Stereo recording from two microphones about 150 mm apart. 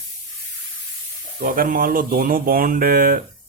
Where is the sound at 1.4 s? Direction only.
65° right (ahead or behind).